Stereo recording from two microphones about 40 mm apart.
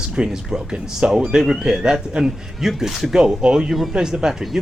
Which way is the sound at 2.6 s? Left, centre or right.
Centre.